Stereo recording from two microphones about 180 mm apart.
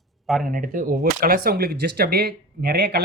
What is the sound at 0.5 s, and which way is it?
Speech, 50° right (ahead or behind).